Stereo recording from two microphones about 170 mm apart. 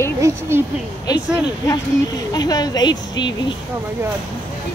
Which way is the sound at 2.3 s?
25° left (ahead or behind).